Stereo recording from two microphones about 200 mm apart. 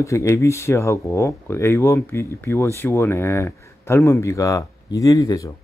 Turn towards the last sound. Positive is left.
turn(degrees=15)  # may be behind; listen again after turning